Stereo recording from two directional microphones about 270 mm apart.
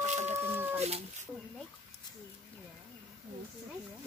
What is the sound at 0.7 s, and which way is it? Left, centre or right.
Cat, right.